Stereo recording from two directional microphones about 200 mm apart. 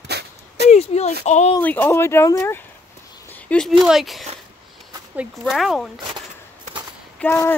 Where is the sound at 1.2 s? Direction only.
35° left (ahead or behind).